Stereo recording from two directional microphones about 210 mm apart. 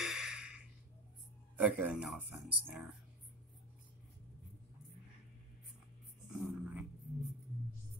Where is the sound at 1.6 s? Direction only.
5° right (ahead or behind).